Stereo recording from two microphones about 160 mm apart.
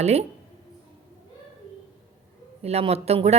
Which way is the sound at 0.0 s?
40° right (ahead or behind).